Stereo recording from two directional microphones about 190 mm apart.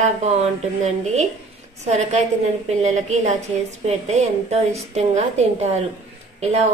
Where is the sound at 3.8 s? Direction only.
35° right (ahead or behind).